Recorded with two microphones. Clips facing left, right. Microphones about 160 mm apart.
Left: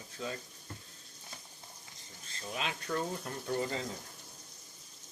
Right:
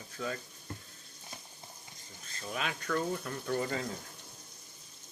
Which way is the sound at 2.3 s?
30° left (ahead or behind).